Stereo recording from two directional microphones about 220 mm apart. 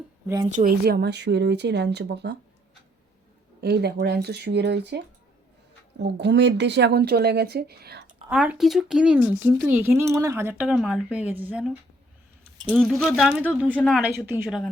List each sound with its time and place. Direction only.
0.4 s speech: 35° right (ahead or behind)
3.6 s speech: 50° right (ahead or behind)
8.3 s speech: 5° right (ahead or behind)
14.3 s speech: 10° right (ahead or behind)